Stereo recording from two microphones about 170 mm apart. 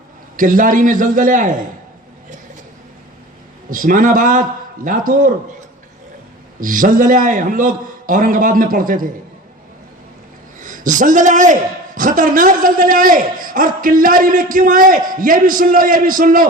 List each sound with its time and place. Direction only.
0.3 s a man's voice: 50° right (ahead or behind)
3.7 s a man's voice: 50° right (ahead or behind)
6.6 s a man's voice: 50° right (ahead or behind)
10.6 s a man's voice: 50° right (ahead or behind)